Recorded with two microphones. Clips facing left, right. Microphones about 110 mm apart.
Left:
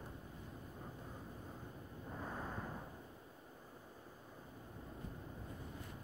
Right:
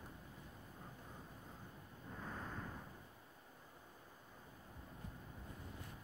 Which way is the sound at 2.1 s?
15° left (ahead or behind).